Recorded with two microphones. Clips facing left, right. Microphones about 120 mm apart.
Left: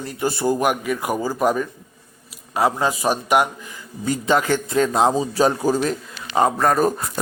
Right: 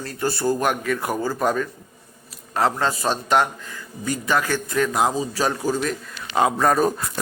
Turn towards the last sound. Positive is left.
turn(degrees=0)  # may be behind; listen again after turning